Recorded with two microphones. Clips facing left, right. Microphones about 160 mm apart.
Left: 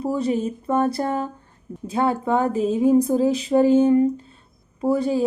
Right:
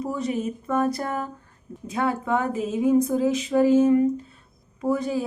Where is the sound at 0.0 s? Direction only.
30° left (ahead or behind).